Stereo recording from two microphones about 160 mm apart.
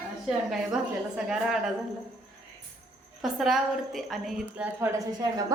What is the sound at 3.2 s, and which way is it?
A woman's voice, centre (ahead or behind).